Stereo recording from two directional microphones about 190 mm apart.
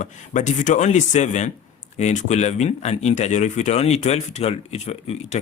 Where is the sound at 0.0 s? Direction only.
40° left (ahead or behind).